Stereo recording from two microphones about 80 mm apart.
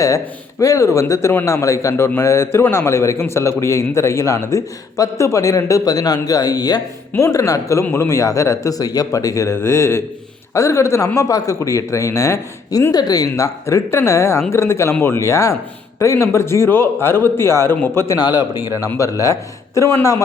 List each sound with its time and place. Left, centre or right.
0.6 s a man's voice: left
7.2 s a man's voice: left
12.9 s a man's voice: left
18.2 s speech: left